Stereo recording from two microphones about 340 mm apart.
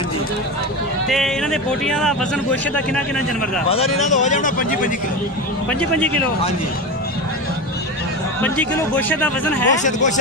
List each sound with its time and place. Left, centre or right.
1.0 s speech: centre
3.7 s speech: centre
8.4 s speech: centre
9.8 s speech: left